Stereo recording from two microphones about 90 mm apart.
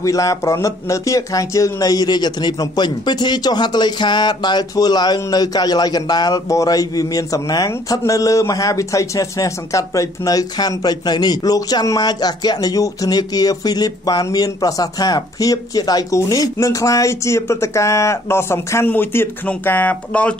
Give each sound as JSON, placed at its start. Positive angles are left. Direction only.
{"t": 0.0, "sound": "speech", "side_deg": 40}